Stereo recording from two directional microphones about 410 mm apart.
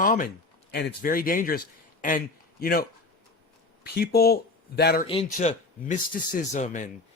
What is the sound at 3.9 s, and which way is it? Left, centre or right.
Speech, left.